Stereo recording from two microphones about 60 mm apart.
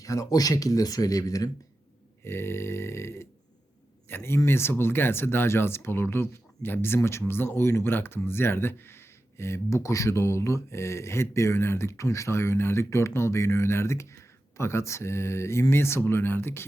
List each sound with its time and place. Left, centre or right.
0.0 s speech: left
2.2 s speech: left